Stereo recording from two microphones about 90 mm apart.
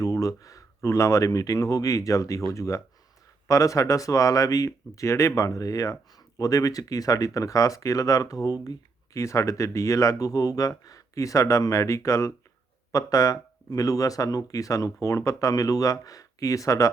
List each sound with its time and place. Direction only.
0.0 s speech: 40° left (ahead or behind)